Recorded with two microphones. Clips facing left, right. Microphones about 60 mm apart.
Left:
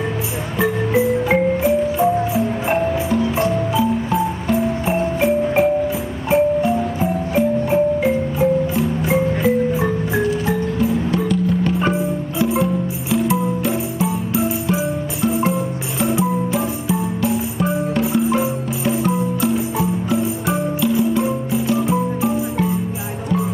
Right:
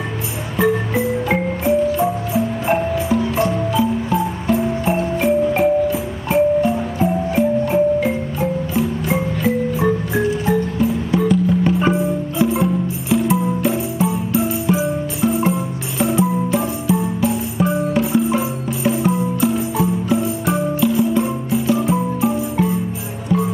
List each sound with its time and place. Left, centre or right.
0.6 s music: centre